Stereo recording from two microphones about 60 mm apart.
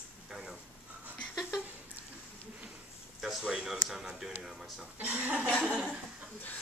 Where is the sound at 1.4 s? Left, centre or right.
Centre.